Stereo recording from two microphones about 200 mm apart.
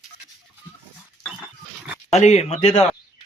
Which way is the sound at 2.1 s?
35° left (ahead or behind).